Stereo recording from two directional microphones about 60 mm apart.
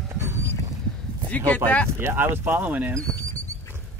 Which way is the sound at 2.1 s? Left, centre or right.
Right.